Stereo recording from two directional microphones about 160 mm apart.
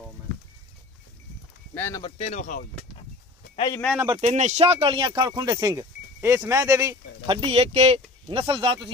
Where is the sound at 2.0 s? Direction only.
35° left (ahead or behind).